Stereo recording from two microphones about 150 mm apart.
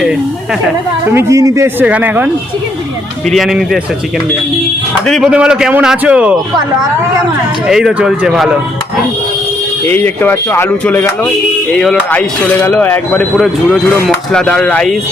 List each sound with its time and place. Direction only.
1.1 s a man's voice: 20° right (ahead or behind)
1.8 s speech: 10° right (ahead or behind)
3.2 s speech: centre (ahead or behind)
5.0 s speech: centre (ahead or behind)
7.7 s speech: 5° right (ahead or behind)
9.8 s speech: 15° left (ahead or behind)